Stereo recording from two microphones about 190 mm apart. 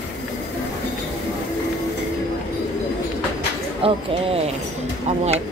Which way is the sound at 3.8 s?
30° right (ahead or behind).